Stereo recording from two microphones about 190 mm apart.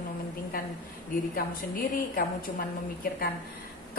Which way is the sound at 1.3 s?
45° left (ahead or behind).